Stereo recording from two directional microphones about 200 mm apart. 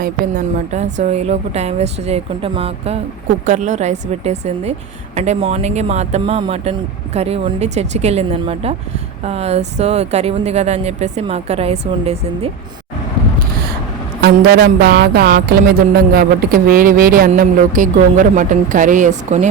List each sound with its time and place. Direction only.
0.0 s speech: 40° right (ahead or behind)
14.2 s speech: 55° right (ahead or behind); by 19.5 s 40° right (ahead or behind)